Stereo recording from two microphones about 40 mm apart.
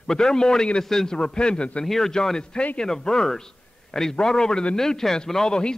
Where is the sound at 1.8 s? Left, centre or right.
Centre.